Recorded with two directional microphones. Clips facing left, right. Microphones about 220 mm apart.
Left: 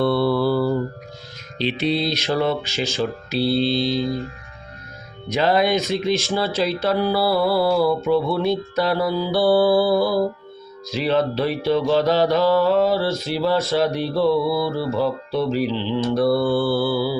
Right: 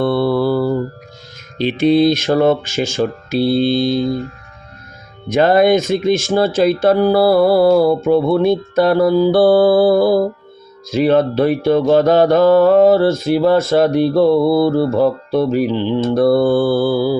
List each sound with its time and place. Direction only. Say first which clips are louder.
0.0 s mantra: right 3 dB; 50° right (ahead or behind)
1.5 s speech: right 9 dB; 50° right (ahead or behind)
5.3 s speech: right 7 dB; 50° right (ahead or behind)